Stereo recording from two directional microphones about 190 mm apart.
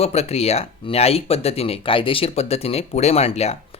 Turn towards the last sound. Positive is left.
turn(degrees=35)  # may be behind; listen again after turning